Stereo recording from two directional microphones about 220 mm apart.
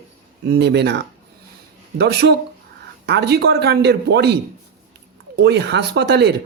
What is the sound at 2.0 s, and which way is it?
A man's voice, 50° right (ahead or behind).